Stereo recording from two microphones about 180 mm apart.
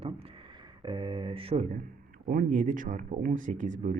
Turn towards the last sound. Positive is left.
turn(degrees=-45)  # may be behind; listen again after turning